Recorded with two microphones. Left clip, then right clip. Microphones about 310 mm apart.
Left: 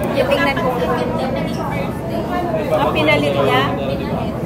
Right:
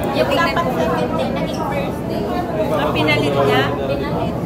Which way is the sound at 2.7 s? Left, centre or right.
Centre.